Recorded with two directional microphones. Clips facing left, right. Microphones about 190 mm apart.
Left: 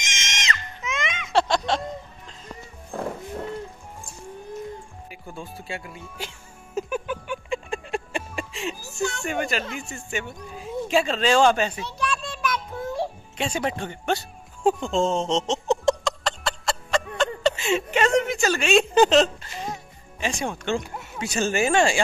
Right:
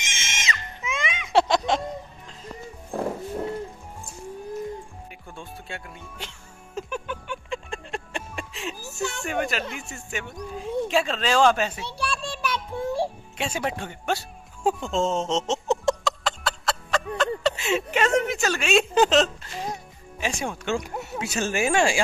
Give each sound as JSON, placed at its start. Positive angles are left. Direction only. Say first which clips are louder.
{"t": 0.3, "sound": "screaming", "louder": "left 1 dB", "side_deg": -5}
{"t": 1.4, "sound": "a sound", "louder": "right 1 dB", "side_deg": -20}
{"t": 2.9, "sound": "a sound", "louder": "right 2 dB", "side_deg": -10}
{"t": 5.1, "sound": "music", "louder": "left 5 dB", "side_deg": 5}
{"t": 10.5, "sound": "speech", "louder": "even", "side_deg": 5}
{"t": 12.0, "sound": "child singing", "louder": "left 2 dB", "side_deg": -30}
{"t": 13.4, "sound": "music", "louder": "left 2 dB", "side_deg": -5}
{"t": 17.2, "sound": "a sound", "louder": "left 1 dB", "side_deg": 0}
{"t": 20.2, "sound": "speech", "louder": "left 1 dB", "side_deg": -5}